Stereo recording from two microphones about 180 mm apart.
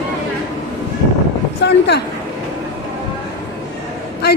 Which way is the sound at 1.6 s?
70° left (ahead or behind).